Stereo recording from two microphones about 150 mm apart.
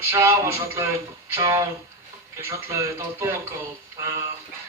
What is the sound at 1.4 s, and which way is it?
Speech, 20° right (ahead or behind).